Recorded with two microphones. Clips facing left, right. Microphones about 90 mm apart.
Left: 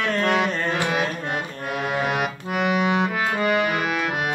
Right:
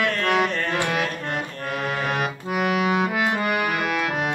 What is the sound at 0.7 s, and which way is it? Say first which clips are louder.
Music: left 1 dB; 5° left (ahead or behind).